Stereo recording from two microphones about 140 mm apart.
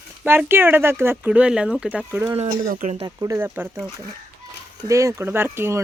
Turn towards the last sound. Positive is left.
turn(degrees=-15)  # may be behind; listen again after turning